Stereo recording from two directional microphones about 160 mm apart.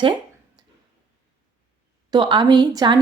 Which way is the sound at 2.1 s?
30° right (ahead or behind).